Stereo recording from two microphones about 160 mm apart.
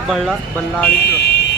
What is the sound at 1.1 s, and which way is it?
Vehicle, 90° left.